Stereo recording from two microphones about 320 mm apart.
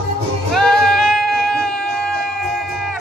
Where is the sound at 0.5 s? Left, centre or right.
Centre.